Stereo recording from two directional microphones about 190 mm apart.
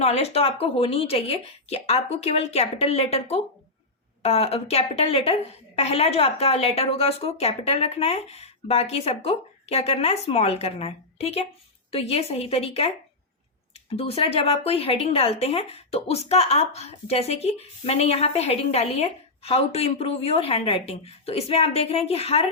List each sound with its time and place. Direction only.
0.0 s speech: 35° left (ahead or behind)